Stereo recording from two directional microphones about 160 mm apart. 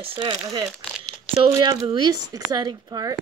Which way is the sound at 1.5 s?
25° right (ahead or behind).